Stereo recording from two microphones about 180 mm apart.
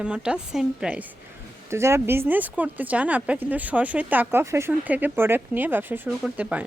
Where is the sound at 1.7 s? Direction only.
15° right (ahead or behind).